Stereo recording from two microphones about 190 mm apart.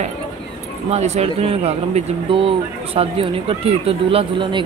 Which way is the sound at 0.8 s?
35° right (ahead or behind).